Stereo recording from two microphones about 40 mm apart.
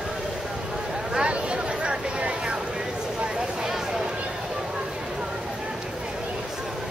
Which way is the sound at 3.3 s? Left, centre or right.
Centre.